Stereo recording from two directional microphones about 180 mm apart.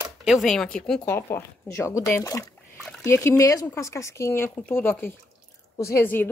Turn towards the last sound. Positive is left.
turn(degrees=10)  # may be behind; listen again after turning